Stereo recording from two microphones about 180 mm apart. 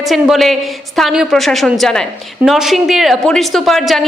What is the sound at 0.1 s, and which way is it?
A woman's voice, centre (ahead or behind).